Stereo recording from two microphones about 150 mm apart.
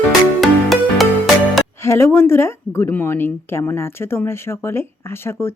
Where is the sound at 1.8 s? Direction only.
20° left (ahead or behind).